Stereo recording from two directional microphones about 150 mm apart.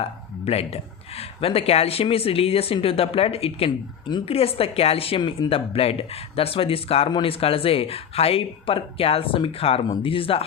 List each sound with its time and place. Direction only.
0.0 s speech: 45° left (ahead or behind)